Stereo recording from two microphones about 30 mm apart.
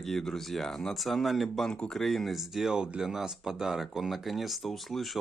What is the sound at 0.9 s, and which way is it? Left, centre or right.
Speech, centre.